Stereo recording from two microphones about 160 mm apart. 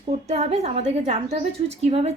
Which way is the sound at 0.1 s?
45° right (ahead or behind).